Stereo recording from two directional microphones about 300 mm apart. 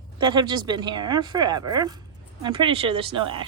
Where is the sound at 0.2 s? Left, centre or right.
Centre.